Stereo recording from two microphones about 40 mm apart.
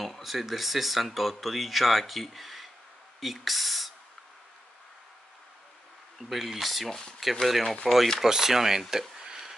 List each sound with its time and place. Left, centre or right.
0.0 s speech: centre
6.2 s speech: centre
6.9 s speech: centre
7.4 s speech: centre